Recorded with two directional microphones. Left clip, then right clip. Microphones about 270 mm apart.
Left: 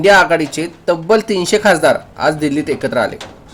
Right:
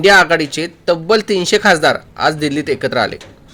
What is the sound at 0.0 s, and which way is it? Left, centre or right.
A man's voice, right.